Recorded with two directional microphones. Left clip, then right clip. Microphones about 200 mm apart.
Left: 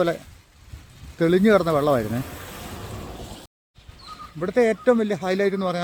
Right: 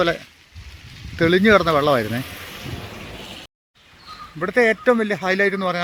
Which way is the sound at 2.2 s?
40° left (ahead or behind).